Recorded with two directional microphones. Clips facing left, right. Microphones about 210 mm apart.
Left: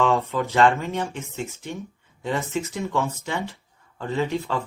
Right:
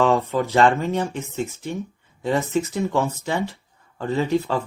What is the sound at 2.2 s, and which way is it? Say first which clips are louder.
Speech: right 5 dB; 35° right (ahead or behind).